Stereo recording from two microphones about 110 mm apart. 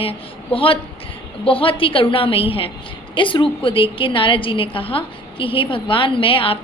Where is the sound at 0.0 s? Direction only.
55° left (ahead or behind).